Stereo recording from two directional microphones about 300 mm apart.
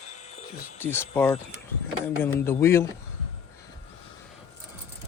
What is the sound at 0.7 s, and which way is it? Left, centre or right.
Speech, centre.